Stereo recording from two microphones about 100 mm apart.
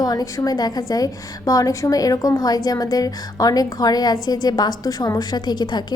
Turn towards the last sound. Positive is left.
turn(degrees=45)  # may be behind; listen again after turning